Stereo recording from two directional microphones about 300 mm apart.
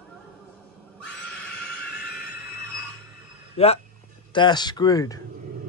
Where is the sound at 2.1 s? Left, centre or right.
Left.